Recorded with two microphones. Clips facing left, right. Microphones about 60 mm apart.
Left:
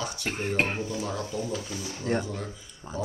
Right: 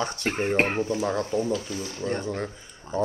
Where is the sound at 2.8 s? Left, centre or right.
Centre.